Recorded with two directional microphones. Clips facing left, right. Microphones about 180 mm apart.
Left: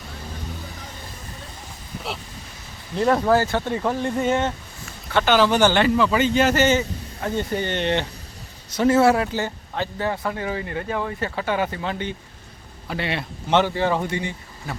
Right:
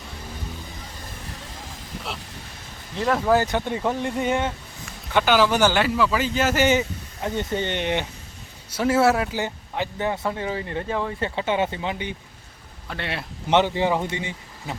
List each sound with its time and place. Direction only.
2.9 s a man's voice: centre (ahead or behind)
3.2 s a man's voice: 15° right (ahead or behind)
9.4 s speech: 15° right (ahead or behind)
12.9 s a man's voice: centre (ahead or behind)
13.5 s speech: 15° right (ahead or behind)